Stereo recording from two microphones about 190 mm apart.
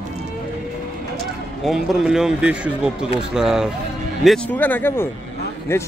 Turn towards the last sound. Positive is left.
turn(degrees=10)  # may be behind; listen again after turning